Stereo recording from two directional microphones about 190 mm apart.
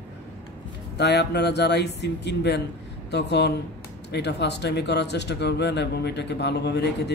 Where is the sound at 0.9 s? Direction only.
60° left (ahead or behind).